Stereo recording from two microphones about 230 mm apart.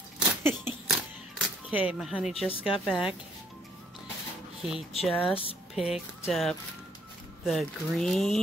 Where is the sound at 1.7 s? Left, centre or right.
Centre.